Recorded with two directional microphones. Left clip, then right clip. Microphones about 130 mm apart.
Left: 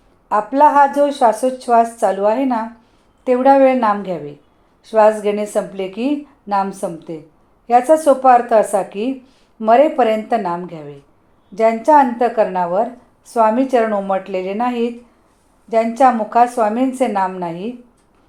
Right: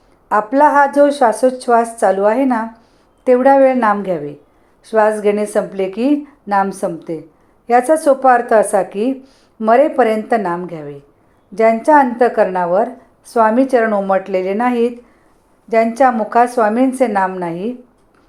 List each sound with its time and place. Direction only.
0.3 s a woman's voice: 40° right (ahead or behind)